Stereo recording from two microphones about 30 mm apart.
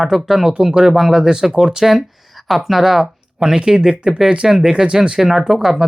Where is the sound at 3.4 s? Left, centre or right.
Right.